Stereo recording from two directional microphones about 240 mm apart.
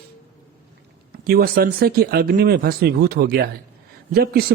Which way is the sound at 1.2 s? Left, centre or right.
Right.